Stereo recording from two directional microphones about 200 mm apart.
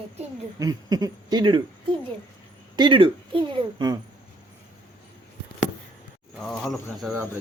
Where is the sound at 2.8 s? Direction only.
25° right (ahead or behind).